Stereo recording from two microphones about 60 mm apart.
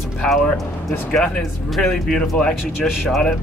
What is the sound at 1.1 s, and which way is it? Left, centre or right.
Speech, centre.